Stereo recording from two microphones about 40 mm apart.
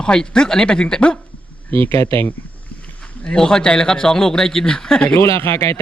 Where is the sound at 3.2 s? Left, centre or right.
Centre.